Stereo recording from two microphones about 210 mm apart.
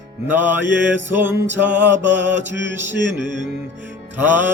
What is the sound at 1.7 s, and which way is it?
Mantra, 55° right (ahead or behind).